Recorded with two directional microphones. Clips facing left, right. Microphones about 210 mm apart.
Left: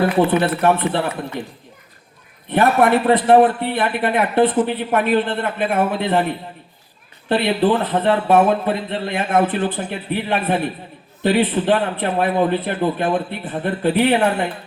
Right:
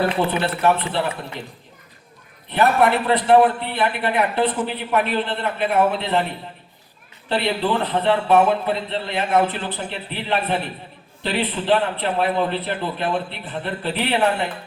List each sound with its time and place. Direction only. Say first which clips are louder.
0.2 s a man's voice: left 5 dB; 50° left (ahead or behind)
2.5 s a man's voice: left 3 dB; 50° left (ahead or behind)
7.3 s a man's voice: left 5 dB; 50° left (ahead or behind)